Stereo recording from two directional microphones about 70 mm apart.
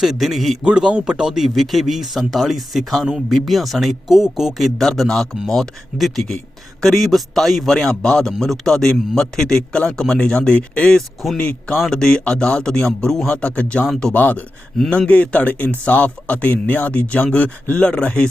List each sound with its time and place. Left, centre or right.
0.0 s speech: centre
0.6 s a man's voice: centre
14.1 s a man's voice: left